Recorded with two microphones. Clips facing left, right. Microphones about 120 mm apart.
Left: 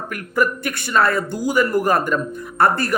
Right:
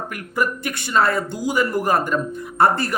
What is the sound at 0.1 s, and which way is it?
Speech, 20° right (ahead or behind).